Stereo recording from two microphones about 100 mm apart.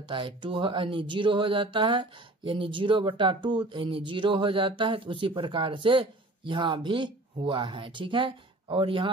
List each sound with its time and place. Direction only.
0.0 s speech: 55° right (ahead or behind)